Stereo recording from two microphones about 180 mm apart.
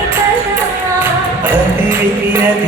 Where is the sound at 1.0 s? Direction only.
10° right (ahead or behind).